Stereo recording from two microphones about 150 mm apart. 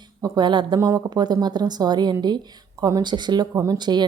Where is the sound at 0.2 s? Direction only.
25° right (ahead or behind).